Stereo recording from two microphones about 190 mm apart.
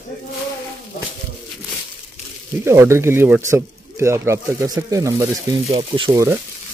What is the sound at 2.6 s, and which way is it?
Speech, 15° right (ahead or behind).